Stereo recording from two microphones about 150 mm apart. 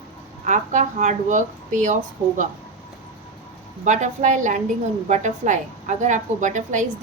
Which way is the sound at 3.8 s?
55° right (ahead or behind).